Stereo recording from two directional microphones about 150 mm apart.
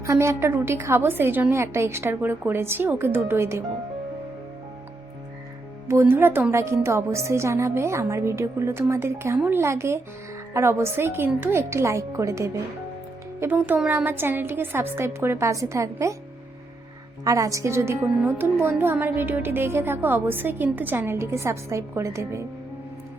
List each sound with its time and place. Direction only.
0.0 s a woman's voice: 20° right (ahead or behind)
5.9 s a woman's voice: 15° right (ahead or behind)
17.2 s a woman's voice: 20° right (ahead or behind)